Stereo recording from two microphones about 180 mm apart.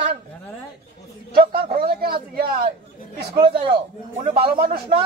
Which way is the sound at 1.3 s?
55° right (ahead or behind).